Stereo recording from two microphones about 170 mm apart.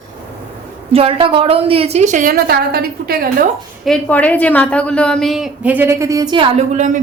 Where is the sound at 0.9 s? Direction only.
35° right (ahead or behind); by 3.5 s 60° right (ahead or behind).